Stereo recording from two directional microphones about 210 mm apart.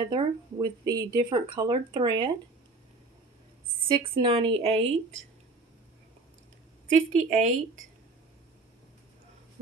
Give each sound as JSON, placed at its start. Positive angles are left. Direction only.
{"t": 0.0, "sound": "speech", "side_deg": -20}
{"t": 3.9, "sound": "speech", "side_deg": -25}
{"t": 7.1, "sound": "a woman's voice", "side_deg": -35}